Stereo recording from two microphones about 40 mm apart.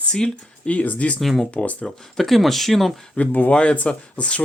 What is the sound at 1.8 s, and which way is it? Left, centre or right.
Speech, centre.